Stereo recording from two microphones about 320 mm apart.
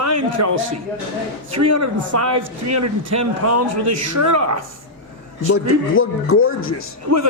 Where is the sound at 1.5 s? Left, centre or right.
Right.